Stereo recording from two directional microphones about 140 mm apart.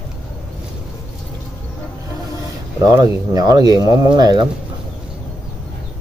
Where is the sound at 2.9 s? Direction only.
25° right (ahead or behind).